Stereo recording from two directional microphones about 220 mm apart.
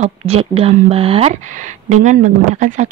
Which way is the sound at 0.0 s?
25° right (ahead or behind).